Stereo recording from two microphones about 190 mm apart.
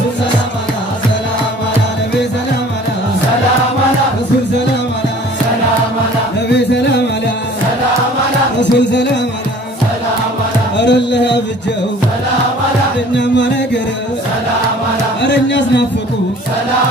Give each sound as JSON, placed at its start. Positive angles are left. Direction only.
{"t": 6.5, "sound": "music", "side_deg": 65}
{"t": 8.7, "sound": "music", "side_deg": 65}
{"t": 10.8, "sound": "music", "side_deg": 65}
{"t": 15.2, "sound": "speech", "side_deg": 65}